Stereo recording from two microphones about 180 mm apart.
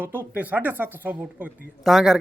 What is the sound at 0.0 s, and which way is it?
Speech, 10° right (ahead or behind).